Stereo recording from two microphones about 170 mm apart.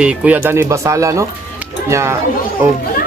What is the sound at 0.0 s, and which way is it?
Speech, 10° right (ahead or behind).